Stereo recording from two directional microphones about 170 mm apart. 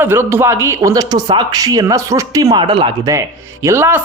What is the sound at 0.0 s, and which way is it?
Speech, 15° right (ahead or behind).